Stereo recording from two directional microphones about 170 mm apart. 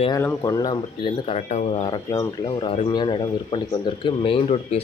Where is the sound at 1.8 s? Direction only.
25° left (ahead or behind).